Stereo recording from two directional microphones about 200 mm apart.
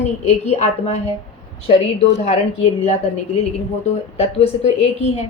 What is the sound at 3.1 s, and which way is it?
A woman's voice, 35° left (ahead or behind).